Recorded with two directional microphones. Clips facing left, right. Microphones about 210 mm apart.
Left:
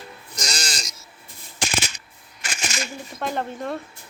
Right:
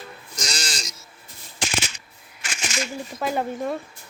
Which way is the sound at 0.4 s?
45° left (ahead or behind).